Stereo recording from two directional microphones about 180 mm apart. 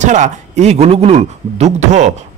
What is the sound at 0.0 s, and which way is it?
Speech, 40° right (ahead or behind).